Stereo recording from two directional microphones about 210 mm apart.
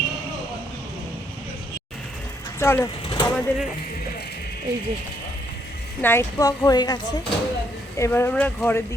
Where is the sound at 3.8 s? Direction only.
50° left (ahead or behind).